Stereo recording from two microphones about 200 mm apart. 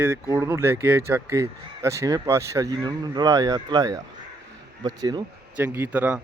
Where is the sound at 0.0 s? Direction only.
10° right (ahead or behind).